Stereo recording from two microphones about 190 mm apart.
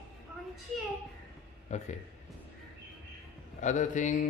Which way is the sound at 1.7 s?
40° left (ahead or behind).